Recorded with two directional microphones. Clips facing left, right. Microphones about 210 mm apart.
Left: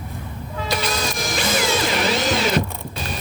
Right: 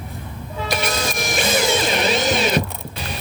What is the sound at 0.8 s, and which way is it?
Music, 20° right (ahead or behind).